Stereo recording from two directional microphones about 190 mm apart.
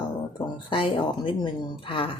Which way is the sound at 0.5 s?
25° left (ahead or behind).